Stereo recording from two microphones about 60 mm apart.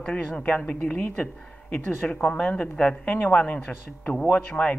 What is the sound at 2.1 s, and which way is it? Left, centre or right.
Speech, left.